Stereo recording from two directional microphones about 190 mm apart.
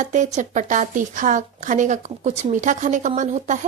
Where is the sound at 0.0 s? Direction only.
40° right (ahead or behind).